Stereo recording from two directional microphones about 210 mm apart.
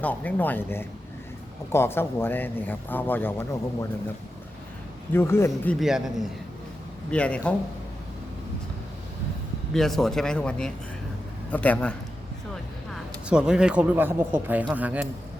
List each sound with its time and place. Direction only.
0.0 s speech: 5° left (ahead or behind)
5.1 s speech: 10° left (ahead or behind)
5.8 s speech: centre (ahead or behind)
9.7 s speech: centre (ahead or behind)